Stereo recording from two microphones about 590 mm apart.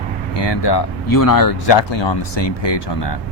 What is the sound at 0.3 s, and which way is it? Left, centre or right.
Speech, left.